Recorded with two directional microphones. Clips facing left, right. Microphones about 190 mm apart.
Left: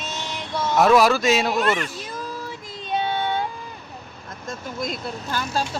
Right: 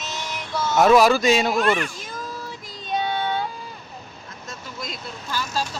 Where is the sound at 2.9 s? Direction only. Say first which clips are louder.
Even; 25° left (ahead or behind).